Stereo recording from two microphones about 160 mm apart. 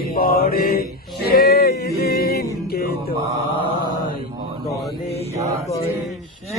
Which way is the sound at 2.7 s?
70° left (ahead or behind).